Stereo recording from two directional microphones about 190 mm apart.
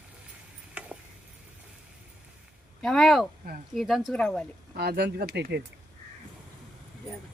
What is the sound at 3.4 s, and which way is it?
Speech, 55° right (ahead or behind).